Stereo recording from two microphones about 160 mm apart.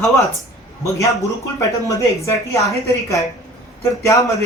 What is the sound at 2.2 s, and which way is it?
Speech, 20° left (ahead or behind).